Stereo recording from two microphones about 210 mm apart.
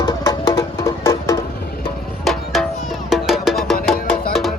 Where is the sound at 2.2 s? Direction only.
Centre (ahead or behind).